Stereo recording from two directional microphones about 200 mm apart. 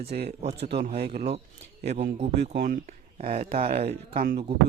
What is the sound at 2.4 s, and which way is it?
Speech, 55° right (ahead or behind).